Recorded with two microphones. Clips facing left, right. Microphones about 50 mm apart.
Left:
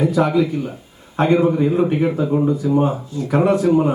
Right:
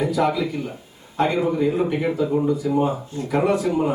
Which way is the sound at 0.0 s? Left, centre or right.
Left.